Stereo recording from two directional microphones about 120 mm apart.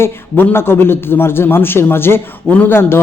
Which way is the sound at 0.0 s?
20° left (ahead or behind).